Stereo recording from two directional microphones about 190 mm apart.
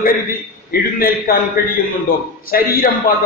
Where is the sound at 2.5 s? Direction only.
50° left (ahead or behind).